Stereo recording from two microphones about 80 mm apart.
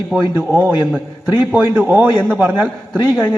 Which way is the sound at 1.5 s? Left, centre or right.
Centre.